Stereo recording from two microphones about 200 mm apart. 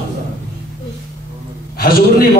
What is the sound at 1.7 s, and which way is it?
Speech, 50° left (ahead or behind).